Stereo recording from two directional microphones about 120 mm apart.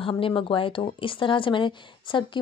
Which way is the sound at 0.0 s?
45° left (ahead or behind).